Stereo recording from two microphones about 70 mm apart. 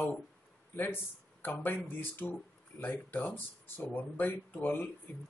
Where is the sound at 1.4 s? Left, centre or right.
Left.